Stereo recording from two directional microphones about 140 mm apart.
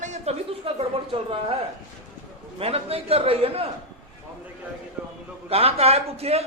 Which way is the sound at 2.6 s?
45° right (ahead or behind).